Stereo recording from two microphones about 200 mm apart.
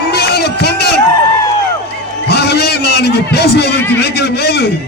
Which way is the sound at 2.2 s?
55° left (ahead or behind).